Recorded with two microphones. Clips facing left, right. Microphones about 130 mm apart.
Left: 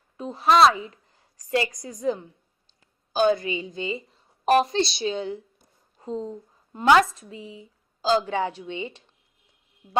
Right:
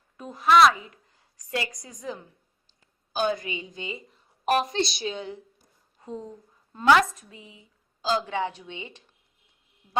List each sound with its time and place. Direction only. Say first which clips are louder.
0.2 s a woman's voice: left 1 dB; 30° left (ahead or behind)